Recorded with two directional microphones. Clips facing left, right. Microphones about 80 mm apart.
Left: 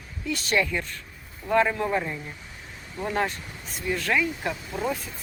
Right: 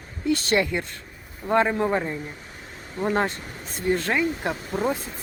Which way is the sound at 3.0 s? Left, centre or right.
Right.